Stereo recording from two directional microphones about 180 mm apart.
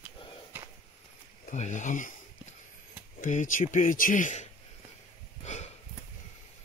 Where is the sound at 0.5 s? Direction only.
10° right (ahead or behind).